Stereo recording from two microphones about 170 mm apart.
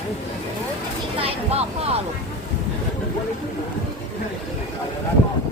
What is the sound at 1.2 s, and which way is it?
Speech, 35° right (ahead or behind).